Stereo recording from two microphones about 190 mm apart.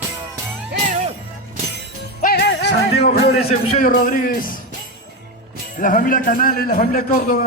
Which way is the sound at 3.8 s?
45° left (ahead or behind).